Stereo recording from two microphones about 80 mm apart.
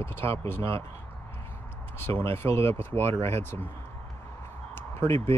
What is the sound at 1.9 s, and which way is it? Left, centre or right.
Speech, left.